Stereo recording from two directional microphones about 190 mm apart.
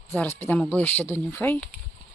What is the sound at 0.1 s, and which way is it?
Speech, 10° left (ahead or behind).